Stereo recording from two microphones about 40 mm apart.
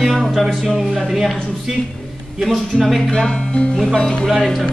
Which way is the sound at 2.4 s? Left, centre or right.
Centre.